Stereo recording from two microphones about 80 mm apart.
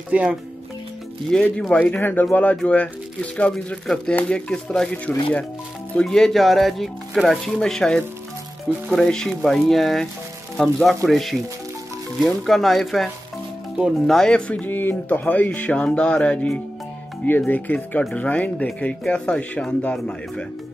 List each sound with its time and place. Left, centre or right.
0.1 s speech: centre
1.3 s speech: centre
14.5 s music: left
18.1 s speech: centre